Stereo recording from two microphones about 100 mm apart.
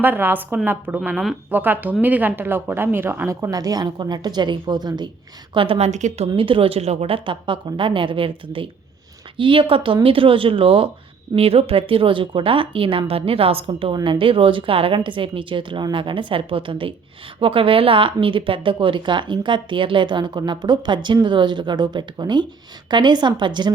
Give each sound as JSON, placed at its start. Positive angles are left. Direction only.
{"t": 0.0, "sound": "speech", "side_deg": -20}
{"t": 5.5, "sound": "a woman's voice", "side_deg": -70}
{"t": 11.3, "sound": "a woman's voice", "side_deg": -80}